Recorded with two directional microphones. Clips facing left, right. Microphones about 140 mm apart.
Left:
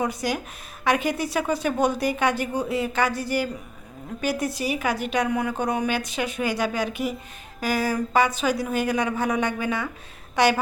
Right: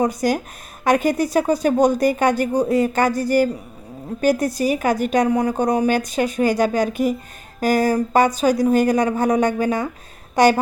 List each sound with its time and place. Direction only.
0.0 s a woman's voice: 45° right (ahead or behind)